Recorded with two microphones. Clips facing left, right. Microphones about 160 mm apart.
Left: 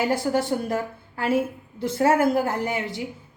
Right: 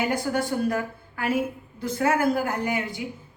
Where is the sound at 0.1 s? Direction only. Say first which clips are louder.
Left 3 dB; 25° left (ahead or behind).